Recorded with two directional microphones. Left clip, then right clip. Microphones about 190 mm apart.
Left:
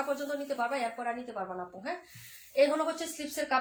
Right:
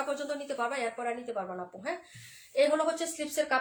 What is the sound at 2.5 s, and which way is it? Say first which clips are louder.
A woman's voice: right 1 dB; 30° right (ahead or behind).